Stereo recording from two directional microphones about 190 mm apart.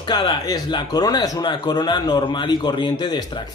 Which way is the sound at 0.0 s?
20° left (ahead or behind).